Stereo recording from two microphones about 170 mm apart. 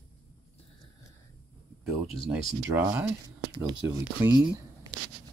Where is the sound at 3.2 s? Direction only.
25° right (ahead or behind).